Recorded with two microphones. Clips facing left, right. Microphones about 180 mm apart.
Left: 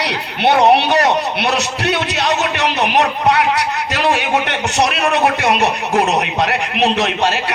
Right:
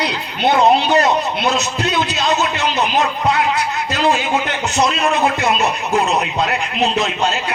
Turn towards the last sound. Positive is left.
turn(degrees=75)  # may be behind; listen again after turning